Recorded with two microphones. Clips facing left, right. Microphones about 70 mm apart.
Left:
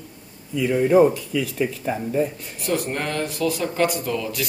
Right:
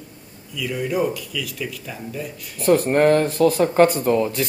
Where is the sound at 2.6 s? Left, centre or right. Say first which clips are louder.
Right 9 dB; right.